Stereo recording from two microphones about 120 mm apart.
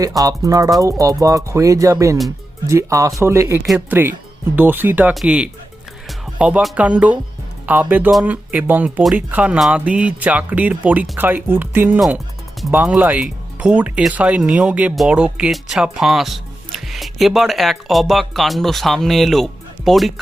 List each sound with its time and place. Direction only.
0.2 s speech: 30° right (ahead or behind); by 5.5 s 5° right (ahead or behind)
6.1 s music: 5° right (ahead or behind)
6.8 s speech: 10° right (ahead or behind)